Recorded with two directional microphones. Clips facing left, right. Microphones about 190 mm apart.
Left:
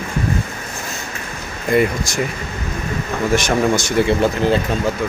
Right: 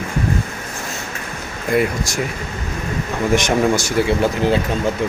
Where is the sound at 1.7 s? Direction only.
Centre (ahead or behind).